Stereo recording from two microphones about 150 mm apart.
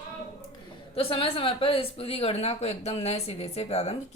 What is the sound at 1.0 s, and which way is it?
A woman's voice, 40° left (ahead or behind).